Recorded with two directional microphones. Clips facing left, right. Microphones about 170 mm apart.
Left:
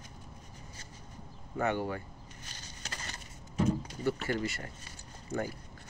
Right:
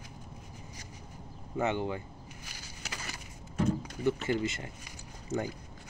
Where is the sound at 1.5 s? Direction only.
20° right (ahead or behind).